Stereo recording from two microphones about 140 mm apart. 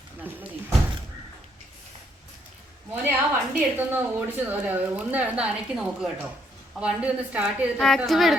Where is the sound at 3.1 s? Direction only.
15° right (ahead or behind).